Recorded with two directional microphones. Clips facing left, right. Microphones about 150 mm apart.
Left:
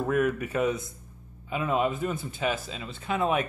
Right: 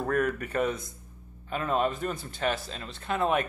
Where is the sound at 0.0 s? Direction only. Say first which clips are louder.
Left 2 dB; 10° left (ahead or behind).